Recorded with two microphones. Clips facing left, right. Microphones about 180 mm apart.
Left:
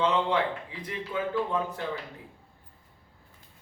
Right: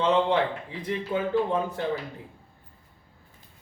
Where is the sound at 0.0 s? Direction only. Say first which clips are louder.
Right 3 dB; 25° right (ahead or behind).